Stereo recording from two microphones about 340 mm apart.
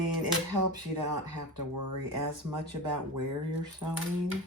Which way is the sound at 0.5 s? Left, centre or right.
Right.